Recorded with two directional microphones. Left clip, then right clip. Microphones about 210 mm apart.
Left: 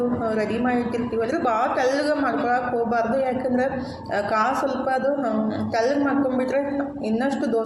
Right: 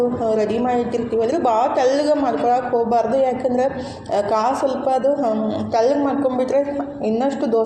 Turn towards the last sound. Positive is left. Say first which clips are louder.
# right 4 dB
turn(degrees=-10)  # may be behind; listen again after turning